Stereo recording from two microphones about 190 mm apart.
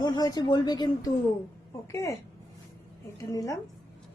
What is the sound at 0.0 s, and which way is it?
A woman's voice, 20° left (ahead or behind).